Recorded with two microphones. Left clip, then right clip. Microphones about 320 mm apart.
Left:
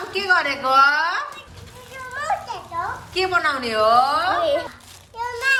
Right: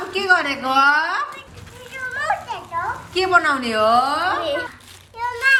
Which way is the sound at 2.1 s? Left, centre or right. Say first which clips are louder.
Right 1 dB; centre.